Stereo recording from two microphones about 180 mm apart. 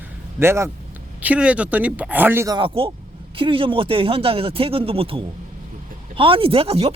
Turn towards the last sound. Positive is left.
turn(degrees=-35)  # may be behind; listen again after turning